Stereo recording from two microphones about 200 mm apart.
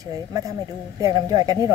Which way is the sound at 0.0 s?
15° right (ahead or behind).